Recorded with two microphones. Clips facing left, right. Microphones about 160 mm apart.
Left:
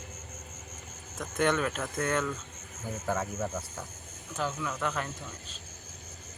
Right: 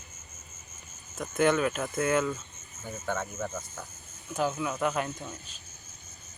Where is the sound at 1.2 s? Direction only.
5° right (ahead or behind).